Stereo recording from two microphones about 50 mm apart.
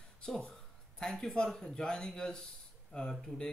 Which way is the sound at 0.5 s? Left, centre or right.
Centre.